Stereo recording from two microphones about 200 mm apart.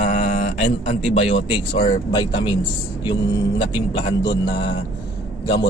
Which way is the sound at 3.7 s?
25° left (ahead or behind).